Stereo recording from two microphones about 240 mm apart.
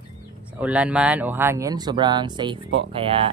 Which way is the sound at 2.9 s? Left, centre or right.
Right.